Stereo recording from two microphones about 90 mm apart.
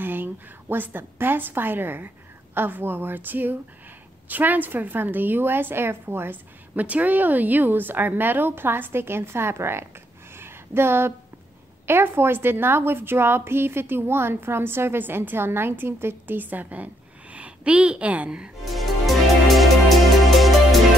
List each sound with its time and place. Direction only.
0.0 s a woman's voice: 20° right (ahead or behind)
10.3 s a sound: 25° right (ahead or behind)
11.8 s a woman's voice: 25° right (ahead or behind)
18.7 s music: centre (ahead or behind)